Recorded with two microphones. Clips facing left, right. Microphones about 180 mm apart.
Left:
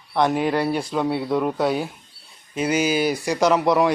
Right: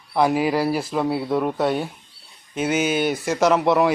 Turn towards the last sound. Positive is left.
turn(degrees=0)  # may be behind; listen again after turning